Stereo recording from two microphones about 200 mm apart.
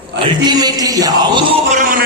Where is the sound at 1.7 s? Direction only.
45° right (ahead or behind).